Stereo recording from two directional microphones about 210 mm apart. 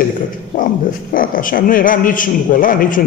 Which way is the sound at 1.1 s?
40° left (ahead or behind).